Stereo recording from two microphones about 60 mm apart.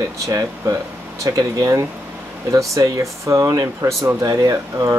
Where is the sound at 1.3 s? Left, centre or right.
Right.